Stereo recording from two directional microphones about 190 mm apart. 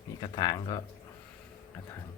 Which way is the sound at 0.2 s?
20° left (ahead or behind).